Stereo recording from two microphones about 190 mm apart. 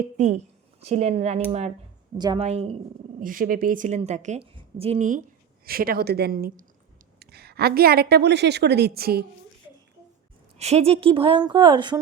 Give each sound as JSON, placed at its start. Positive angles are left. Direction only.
{"t": 0.8, "sound": "a woman's voice", "side_deg": -35}
{"t": 2.1, "sound": "a woman's voice", "side_deg": -25}
{"t": 3.2, "sound": "a woman's voice", "side_deg": -45}
{"t": 5.6, "sound": "a woman's voice", "side_deg": -50}
{"t": 10.6, "sound": "a woman's voice", "side_deg": -35}